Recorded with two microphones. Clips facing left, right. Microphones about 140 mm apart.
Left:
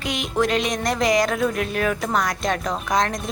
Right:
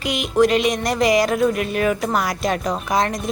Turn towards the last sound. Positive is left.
turn(degrees=-5)  # may be behind; listen again after turning